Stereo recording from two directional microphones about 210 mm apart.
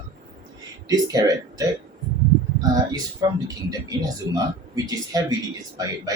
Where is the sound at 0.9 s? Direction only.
15° right (ahead or behind).